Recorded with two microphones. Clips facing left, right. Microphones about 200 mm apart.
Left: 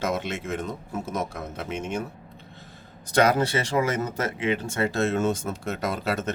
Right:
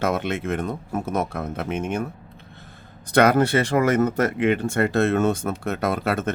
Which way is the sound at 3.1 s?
60° right (ahead or behind).